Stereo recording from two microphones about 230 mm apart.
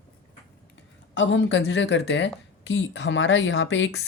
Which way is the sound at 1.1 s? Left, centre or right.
Left.